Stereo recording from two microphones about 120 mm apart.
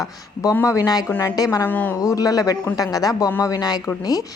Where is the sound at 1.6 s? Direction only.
15° left (ahead or behind).